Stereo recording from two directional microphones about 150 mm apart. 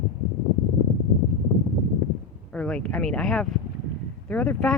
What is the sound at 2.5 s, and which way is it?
Speech, 5° left (ahead or behind).